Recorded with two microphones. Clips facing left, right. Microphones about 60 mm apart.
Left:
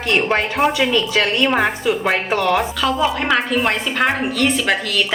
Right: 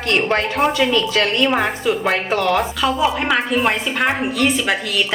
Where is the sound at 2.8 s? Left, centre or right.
Centre.